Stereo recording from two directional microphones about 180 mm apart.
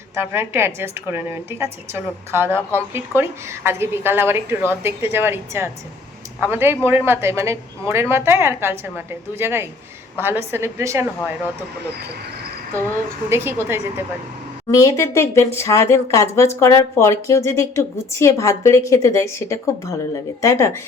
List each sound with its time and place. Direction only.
0.2 s a woman's voice: 15° right (ahead or behind)
13.3 s a woman's voice: 10° right (ahead or behind)
14.7 s speech: 20° left (ahead or behind)